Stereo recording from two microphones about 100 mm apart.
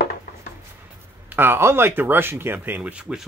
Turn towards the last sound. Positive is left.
turn(degrees=-10)  # may be behind; listen again after turning